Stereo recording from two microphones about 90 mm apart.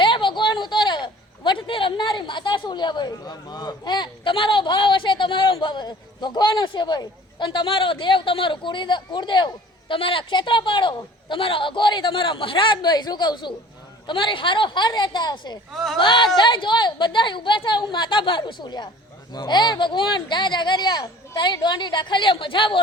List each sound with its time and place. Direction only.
0.0 s speech: 65° left (ahead or behind)
9.9 s speech: 80° left; by 10.9 s 60° left (ahead or behind)
11.3 s speech: 80° left; by 13.5 s 55° left (ahead or behind)
14.1 s speech: 65° left (ahead or behind)
15.7 s speech: 5° left (ahead or behind)
16.0 s speech: 65° left (ahead or behind)